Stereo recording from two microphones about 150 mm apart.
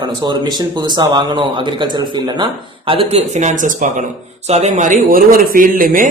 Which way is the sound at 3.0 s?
45° right (ahead or behind).